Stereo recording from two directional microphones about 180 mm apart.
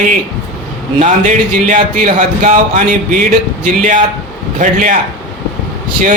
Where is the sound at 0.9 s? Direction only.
45° right (ahead or behind).